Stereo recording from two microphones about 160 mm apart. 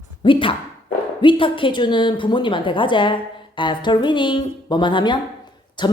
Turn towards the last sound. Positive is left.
turn(degrees=30)  # may be behind; listen again after turning